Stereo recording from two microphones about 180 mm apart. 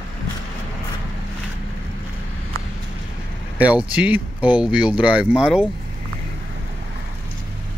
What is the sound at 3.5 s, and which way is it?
Speech, 5° right (ahead or behind).